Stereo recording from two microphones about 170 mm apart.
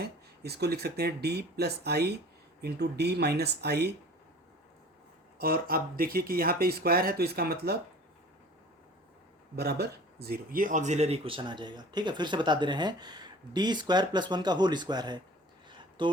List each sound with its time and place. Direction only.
0.0 s speech: 70° right (ahead or behind)
5.4 s speech: 60° right (ahead or behind)
9.6 s speech: 70° right (ahead or behind); by 15.2 s 25° right (ahead or behind)
15.8 s a sound: 30° right (ahead or behind)